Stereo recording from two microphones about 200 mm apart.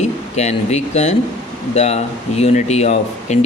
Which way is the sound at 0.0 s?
35° left (ahead or behind).